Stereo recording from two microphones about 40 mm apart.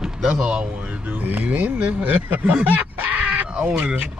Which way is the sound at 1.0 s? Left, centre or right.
Right.